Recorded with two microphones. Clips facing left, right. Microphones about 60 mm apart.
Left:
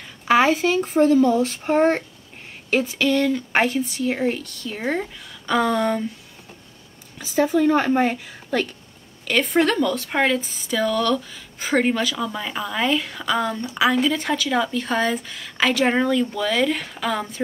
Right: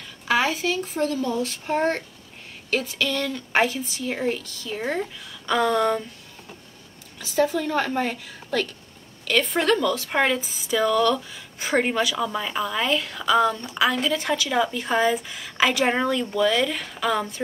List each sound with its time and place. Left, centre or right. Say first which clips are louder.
0.3 s speech: left 5 dB; left
3.0 s speech: left 6 dB; centre
7.2 s speech: left 3 dB; centre
9.2 s speech: left 3 dB; centre